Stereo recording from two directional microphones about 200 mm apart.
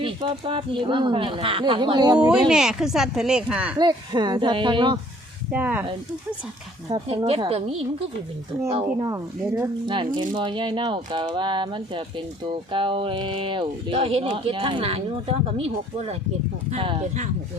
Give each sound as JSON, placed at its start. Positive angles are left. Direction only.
{"t": 0.0, "sound": "speech", "side_deg": -25}
{"t": 2.1, "sound": "speech", "side_deg": -5}
{"t": 3.8, "sound": "speech", "side_deg": -20}
{"t": 5.5, "sound": "speech", "side_deg": -10}
{"t": 6.9, "sound": "speech", "side_deg": -25}